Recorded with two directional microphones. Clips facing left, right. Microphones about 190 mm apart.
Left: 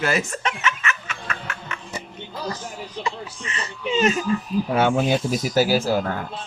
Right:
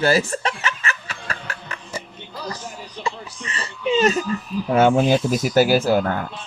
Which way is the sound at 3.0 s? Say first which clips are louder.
Right 3 dB; 35° right (ahead or behind).